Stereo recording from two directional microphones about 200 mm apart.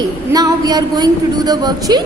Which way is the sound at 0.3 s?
20° right (ahead or behind).